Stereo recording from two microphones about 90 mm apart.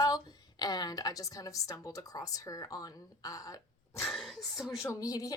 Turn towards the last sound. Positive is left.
turn(degrees=40)  # may be behind; listen again after turning